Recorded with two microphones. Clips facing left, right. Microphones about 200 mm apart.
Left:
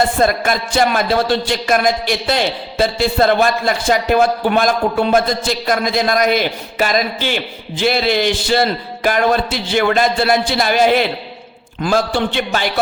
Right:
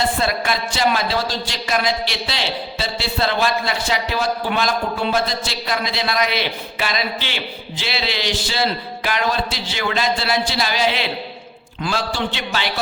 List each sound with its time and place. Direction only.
0.2 s a man's voice: 50° left (ahead or behind)